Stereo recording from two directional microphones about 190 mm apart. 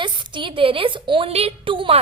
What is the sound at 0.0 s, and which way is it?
A woman's voice, 25° right (ahead or behind).